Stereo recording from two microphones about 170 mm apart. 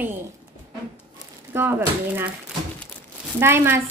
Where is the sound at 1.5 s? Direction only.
10° right (ahead or behind).